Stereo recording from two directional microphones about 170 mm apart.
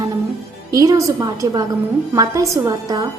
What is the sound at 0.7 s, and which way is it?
A woman's voice, 20° right (ahead or behind).